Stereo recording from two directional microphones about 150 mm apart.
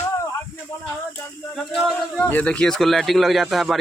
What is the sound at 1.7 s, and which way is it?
Speech, centre (ahead or behind).